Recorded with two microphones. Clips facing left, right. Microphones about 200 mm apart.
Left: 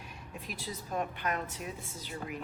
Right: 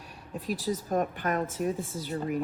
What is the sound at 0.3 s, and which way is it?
Speech, 40° right (ahead or behind).